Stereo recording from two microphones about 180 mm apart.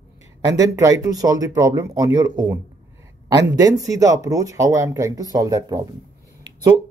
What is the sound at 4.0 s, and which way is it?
Speech, 20° right (ahead or behind).